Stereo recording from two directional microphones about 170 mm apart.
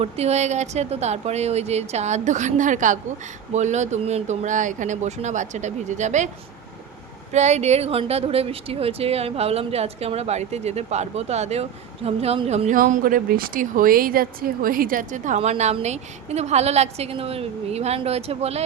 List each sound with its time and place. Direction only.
0.0 s speech: 40° right (ahead or behind)
7.3 s speech: 40° right (ahead or behind)